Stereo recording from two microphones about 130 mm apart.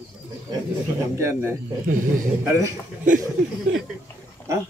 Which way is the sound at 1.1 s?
20° right (ahead or behind).